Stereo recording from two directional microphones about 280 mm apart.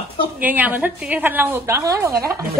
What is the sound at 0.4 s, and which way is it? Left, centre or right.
A woman's voice, centre.